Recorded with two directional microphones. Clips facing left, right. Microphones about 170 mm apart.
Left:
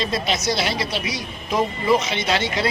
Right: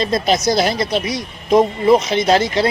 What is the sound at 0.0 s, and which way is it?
Speech, 40° right (ahead or behind).